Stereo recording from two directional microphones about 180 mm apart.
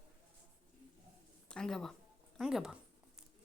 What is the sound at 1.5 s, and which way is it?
A woman's voice, 5° left (ahead or behind).